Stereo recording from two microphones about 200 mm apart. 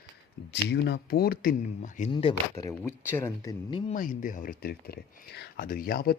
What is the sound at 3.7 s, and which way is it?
Speech, 25° left (ahead or behind).